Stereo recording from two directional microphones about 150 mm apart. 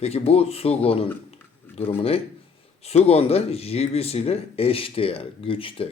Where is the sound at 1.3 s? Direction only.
40° left (ahead or behind).